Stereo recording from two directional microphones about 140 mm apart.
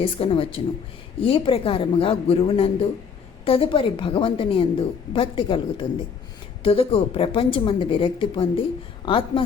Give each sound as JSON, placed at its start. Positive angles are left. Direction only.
{"t": 0.0, "sound": "a woman's voice", "side_deg": 40}